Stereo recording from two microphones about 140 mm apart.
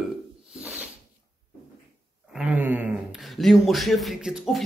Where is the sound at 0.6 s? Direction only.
10° right (ahead or behind).